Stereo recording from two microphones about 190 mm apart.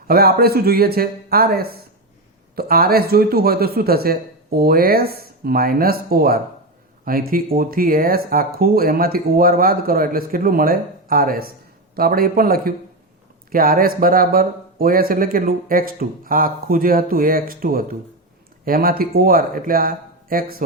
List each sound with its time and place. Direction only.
0.1 s speech: 55° right (ahead or behind)